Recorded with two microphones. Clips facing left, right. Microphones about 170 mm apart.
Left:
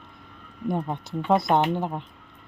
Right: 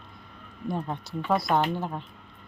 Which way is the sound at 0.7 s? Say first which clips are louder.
Left 4 dB; 15° left (ahead or behind).